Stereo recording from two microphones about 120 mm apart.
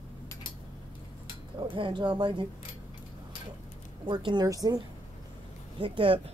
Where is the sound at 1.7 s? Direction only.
45° right (ahead or behind).